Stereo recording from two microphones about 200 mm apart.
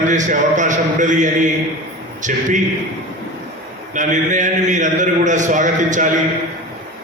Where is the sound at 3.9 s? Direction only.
40° right (ahead or behind).